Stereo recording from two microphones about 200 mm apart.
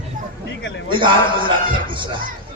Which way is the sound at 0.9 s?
25° right (ahead or behind).